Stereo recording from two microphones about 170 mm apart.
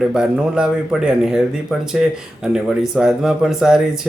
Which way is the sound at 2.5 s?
5° right (ahead or behind).